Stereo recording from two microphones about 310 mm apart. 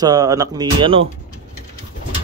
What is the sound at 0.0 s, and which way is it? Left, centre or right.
Speech, centre.